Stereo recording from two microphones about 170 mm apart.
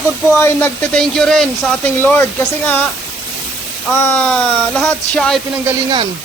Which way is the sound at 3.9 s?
15° left (ahead or behind).